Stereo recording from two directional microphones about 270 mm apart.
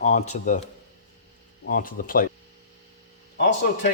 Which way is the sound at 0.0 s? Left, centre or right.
Left.